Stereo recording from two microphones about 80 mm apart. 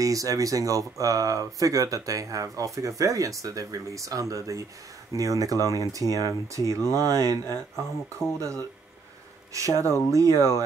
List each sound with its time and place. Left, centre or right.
0.0 s speech: right